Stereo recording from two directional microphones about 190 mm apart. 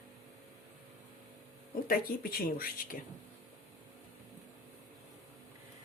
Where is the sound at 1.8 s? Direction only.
50° left (ahead or behind).